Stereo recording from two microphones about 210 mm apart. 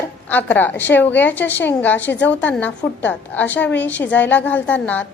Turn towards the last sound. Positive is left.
turn(degrees=5)  # may be behind; listen again after turning